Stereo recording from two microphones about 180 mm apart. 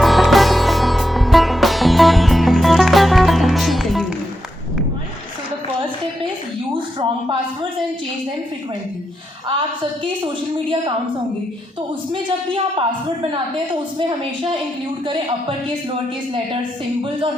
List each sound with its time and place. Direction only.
0.0 s music: centre (ahead or behind)
9.5 s a woman's voice: 30° right (ahead or behind)